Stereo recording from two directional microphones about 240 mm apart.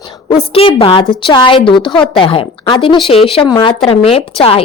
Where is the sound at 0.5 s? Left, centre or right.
Left.